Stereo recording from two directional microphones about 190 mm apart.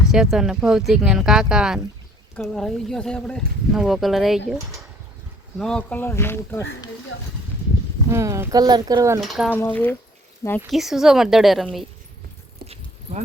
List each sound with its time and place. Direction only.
0.1 s speech: 5° right (ahead or behind)
5.5 s speech: 5° left (ahead or behind)
8.1 s speech: 15° right (ahead or behind)
9.2 s speech: centre (ahead or behind)
10.7 s speech: centre (ahead or behind)
12.6 s a sound: 35° right (ahead or behind)